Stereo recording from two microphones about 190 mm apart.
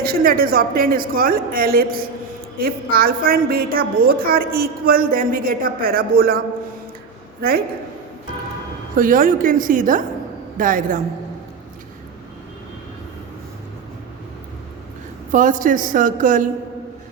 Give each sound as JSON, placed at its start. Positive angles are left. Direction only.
{"t": 0.0, "sound": "a woman's voice", "side_deg": -50}
{"t": 9.0, "sound": "a woman's voice", "side_deg": -45}
{"t": 15.3, "sound": "a woman's voice", "side_deg": -45}